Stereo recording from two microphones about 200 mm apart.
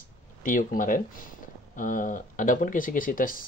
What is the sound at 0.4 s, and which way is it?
Speech, 40° left (ahead or behind).